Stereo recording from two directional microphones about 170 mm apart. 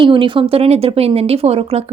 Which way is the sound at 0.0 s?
30° right (ahead or behind).